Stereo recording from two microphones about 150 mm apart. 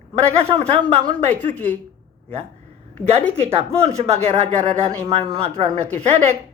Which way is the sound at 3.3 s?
45° right (ahead or behind).